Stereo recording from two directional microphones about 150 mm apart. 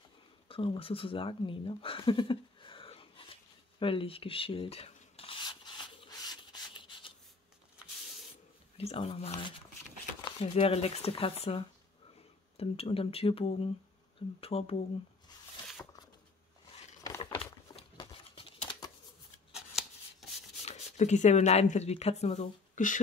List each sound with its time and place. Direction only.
0.5 s speech: 40° left (ahead or behind)
3.8 s rub: 35° left (ahead or behind)
8.7 s speech: 40° left (ahead or behind)
17.2 s a sound: 40° left (ahead or behind)
17.7 s crumpling: 35° left (ahead or behind)
19.5 s a sound: centre (ahead or behind)
20.6 s speech: 45° left (ahead or behind)